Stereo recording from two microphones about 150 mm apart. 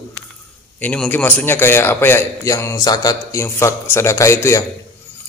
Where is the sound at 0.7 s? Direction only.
10° left (ahead or behind).